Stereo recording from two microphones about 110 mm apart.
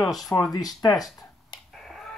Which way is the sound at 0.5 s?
35° left (ahead or behind).